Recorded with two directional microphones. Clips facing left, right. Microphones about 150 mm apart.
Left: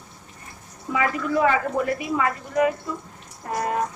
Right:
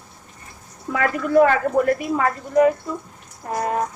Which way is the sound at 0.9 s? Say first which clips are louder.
Right 5 dB; 55° right (ahead or behind).